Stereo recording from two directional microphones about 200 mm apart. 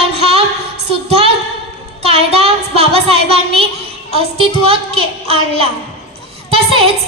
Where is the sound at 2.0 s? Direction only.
30° right (ahead or behind).